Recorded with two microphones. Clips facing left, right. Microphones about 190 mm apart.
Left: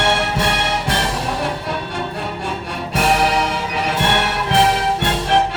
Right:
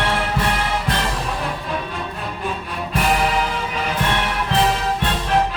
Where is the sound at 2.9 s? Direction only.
80° left.